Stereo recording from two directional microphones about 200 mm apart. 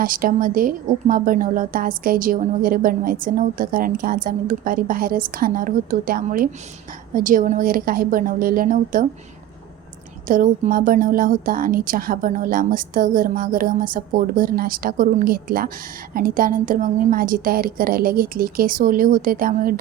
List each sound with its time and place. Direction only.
0.0 s a woman's voice: 45° right (ahead or behind)
10.2 s a woman's voice: 40° right (ahead or behind)